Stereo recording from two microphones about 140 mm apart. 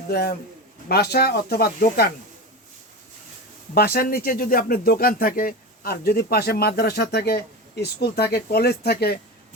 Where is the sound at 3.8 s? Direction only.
90° left.